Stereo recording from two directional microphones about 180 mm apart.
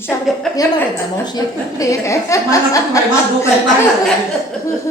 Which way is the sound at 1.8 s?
15° left (ahead or behind).